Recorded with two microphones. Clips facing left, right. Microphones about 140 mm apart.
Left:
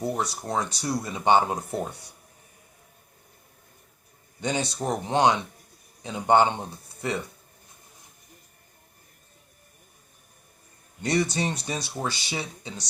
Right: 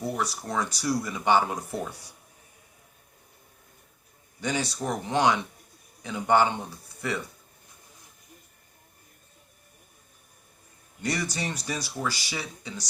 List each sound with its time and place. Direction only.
0.0 s speech: 25° left (ahead or behind)
4.4 s speech: 25° left (ahead or behind)
11.0 s speech: 25° left (ahead or behind)